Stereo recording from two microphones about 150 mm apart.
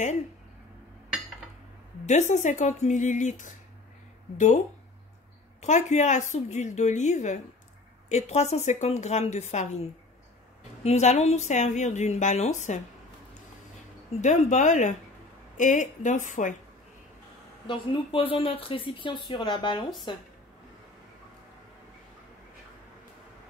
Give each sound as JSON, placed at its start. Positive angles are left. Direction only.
{"t": 2.0, "sound": "a woman's voice", "side_deg": 50}
{"t": 14.2, "sound": "a woman's voice", "side_deg": 50}
{"t": 17.6, "sound": "speech", "side_deg": 35}